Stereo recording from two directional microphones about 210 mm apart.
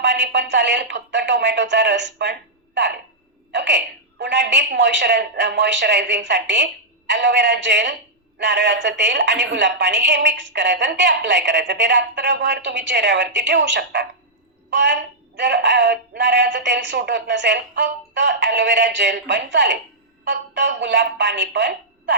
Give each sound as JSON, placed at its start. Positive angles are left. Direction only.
{"t": 0.0, "sound": "a woman's voice", "side_deg": -55}
{"t": 3.5, "sound": "a woman's voice", "side_deg": -55}